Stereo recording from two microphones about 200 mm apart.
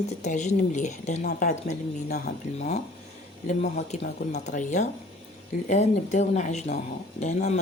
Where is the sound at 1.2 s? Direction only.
45° left (ahead or behind).